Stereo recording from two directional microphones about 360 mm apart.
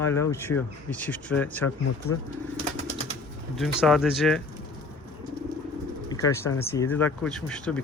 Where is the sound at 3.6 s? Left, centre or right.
Centre.